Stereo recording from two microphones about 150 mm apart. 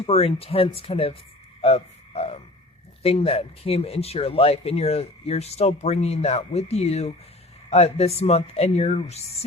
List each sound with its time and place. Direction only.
0.0 s speech: 40° left (ahead or behind)
1.6 s a sound: 40° left (ahead or behind)
3.0 s speech: 40° left (ahead or behind)